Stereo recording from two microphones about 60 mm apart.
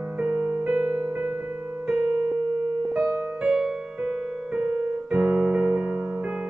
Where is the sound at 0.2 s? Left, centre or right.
Right.